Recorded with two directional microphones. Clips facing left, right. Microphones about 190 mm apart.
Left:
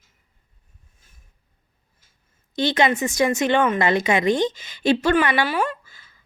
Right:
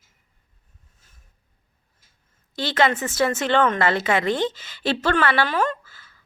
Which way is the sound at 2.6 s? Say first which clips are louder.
Left 2 dB; 15° left (ahead or behind).